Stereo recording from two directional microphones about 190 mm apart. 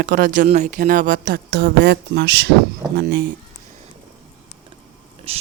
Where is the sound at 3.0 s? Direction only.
55° right (ahead or behind).